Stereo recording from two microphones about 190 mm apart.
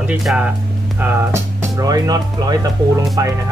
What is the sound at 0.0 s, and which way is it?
Speech, 5° right (ahead or behind).